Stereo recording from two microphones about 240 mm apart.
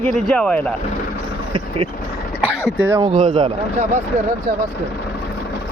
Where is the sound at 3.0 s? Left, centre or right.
Right.